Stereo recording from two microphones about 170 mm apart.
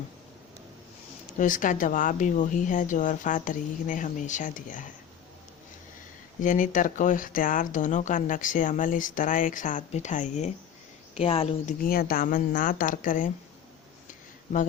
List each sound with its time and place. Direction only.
1.4 s speech: 50° left (ahead or behind)
6.4 s speech: 50° left (ahead or behind)
11.8 s speech: 60° left (ahead or behind)
14.1 s a sound: 50° left (ahead or behind)